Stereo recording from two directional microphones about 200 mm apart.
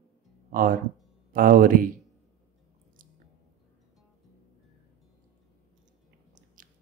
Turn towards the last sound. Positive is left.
turn(degrees=-40)  # may be behind; listen again after turning